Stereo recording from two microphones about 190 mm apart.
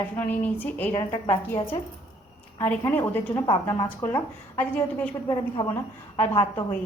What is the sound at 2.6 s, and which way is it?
Speech, 10° left (ahead or behind).